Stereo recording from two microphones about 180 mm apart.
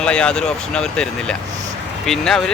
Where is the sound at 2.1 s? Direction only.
5° left (ahead or behind).